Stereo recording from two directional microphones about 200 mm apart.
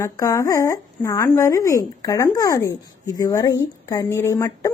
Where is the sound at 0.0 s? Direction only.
15° left (ahead or behind).